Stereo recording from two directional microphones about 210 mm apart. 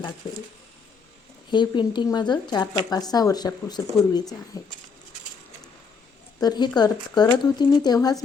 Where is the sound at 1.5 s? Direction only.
20° left (ahead or behind).